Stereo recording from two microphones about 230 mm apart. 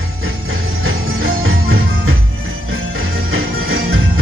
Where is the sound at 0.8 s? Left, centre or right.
Right.